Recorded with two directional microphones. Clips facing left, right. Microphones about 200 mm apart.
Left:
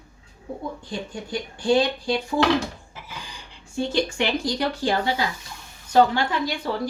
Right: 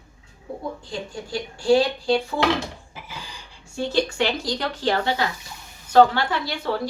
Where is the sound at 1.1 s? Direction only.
20° left (ahead or behind).